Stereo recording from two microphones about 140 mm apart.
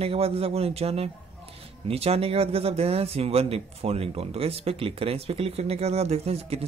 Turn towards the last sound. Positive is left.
turn(degrees=-50)  # may be behind; listen again after turning